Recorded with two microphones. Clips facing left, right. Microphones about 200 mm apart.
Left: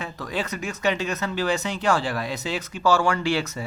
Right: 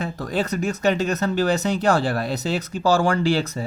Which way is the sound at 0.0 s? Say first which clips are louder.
Right 5 dB; 35° right (ahead or behind).